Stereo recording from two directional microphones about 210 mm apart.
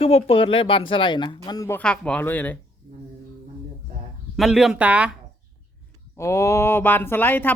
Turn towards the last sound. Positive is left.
turn(degrees=10)  # may be behind; listen again after turning